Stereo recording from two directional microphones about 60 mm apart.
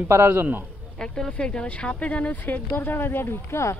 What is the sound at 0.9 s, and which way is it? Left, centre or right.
Speech, centre.